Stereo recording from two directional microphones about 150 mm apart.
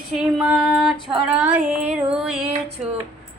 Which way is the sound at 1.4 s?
10° right (ahead or behind).